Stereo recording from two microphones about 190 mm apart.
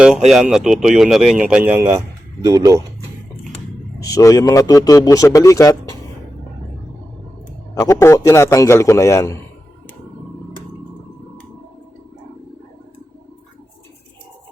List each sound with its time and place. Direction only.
0.3 s speech: centre (ahead or behind); by 2.8 s 15° right (ahead or behind)
4.0 s a man's voice: 15° left (ahead or behind)
7.8 s a man's voice: 15° left (ahead or behind)